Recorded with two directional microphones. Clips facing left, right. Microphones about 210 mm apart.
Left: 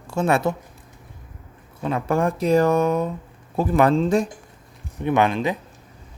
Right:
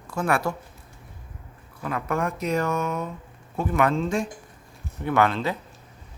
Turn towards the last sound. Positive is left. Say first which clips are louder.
# left 3 dB
turn(degrees=15)  # may be behind; listen again after turning